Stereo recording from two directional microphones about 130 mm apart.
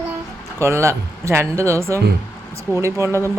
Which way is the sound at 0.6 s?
20° right (ahead or behind).